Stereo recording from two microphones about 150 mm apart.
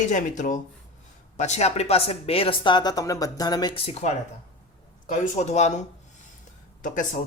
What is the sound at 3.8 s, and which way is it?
Speech, 40° left (ahead or behind).